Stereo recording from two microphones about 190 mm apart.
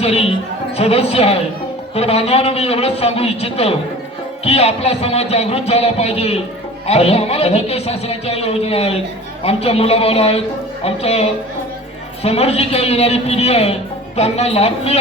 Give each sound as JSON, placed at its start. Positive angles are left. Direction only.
{"t": 0.0, "sound": "a man's voice", "side_deg": 30}